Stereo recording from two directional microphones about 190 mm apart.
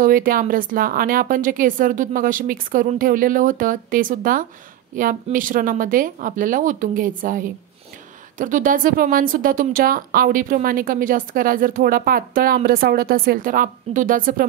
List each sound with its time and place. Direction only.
0.0 s a woman's voice: 45° right (ahead or behind)